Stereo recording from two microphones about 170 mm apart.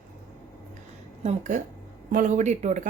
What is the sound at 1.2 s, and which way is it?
A woman's voice, 40° right (ahead or behind).